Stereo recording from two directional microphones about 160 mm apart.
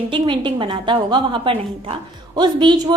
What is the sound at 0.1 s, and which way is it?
A woman's voice, 30° right (ahead or behind).